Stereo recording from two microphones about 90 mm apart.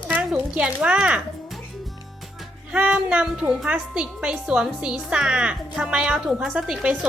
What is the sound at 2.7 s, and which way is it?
A woman's voice, 15° right (ahead or behind).